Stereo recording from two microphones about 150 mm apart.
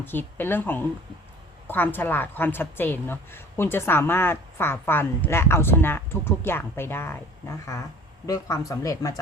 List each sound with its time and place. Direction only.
0.0 s a woman's voice: 15° left (ahead or behind)